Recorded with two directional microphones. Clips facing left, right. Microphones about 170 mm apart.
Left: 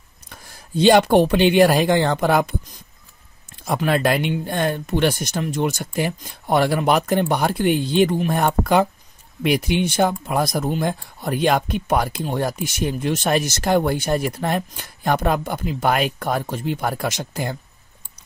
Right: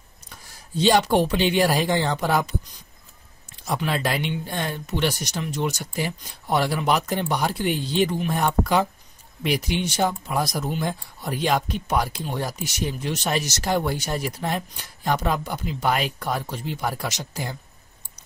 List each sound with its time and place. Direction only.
0.3 s speech: 55° left (ahead or behind)
3.6 s speech: 55° left (ahead or behind)